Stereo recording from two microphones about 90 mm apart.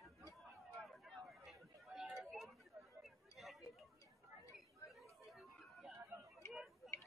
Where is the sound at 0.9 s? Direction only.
Centre (ahead or behind).